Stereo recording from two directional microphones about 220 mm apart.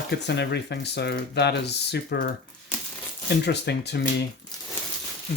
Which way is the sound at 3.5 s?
50° left (ahead or behind).